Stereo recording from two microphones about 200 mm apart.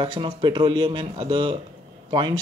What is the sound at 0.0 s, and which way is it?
Speech, 25° right (ahead or behind).